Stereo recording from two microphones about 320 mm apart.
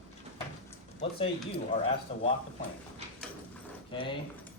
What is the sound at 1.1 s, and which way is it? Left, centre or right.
Speech, centre.